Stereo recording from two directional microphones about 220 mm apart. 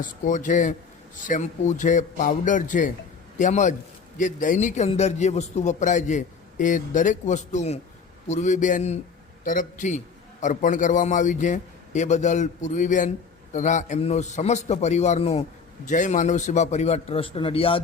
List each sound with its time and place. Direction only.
0.0 s a man's voice: 35° left (ahead or behind)